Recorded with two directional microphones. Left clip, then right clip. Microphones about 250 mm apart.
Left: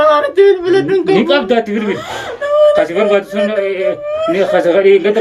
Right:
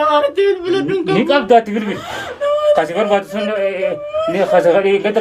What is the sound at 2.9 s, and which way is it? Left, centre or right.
A man's voice, centre.